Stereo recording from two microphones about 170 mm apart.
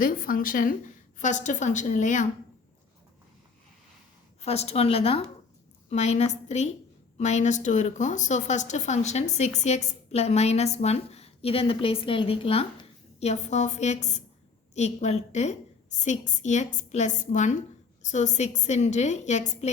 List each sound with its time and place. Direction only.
0.0 s a woman's voice: 55° left (ahead or behind)
4.4 s a woman's voice: 40° left (ahead or behind)